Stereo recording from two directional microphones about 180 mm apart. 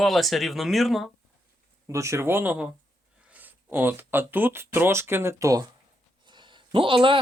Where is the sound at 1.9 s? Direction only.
15° right (ahead or behind).